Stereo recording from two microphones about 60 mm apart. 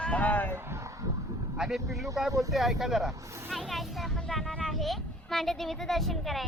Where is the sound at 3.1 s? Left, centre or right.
Right.